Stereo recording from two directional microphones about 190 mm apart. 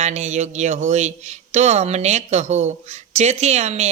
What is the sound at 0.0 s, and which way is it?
Speech, 35° right (ahead or behind).